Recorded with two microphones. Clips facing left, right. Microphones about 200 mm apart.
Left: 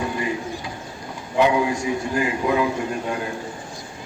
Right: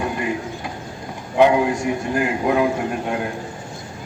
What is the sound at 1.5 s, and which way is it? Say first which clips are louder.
A man's voice: right 2 dB; 60° right (ahead or behind).